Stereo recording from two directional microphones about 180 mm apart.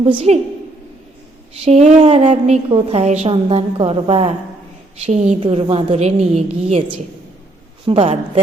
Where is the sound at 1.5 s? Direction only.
35° right (ahead or behind).